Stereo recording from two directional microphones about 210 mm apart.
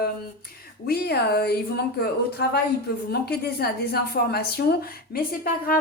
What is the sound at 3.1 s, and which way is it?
A woman's voice, 50° left (ahead or behind).